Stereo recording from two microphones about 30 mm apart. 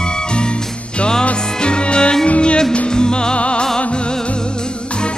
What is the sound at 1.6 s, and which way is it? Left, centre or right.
Music, left.